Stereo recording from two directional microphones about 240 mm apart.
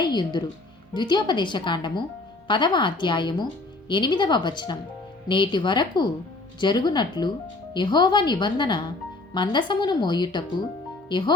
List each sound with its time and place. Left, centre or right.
0.0 s speech: centre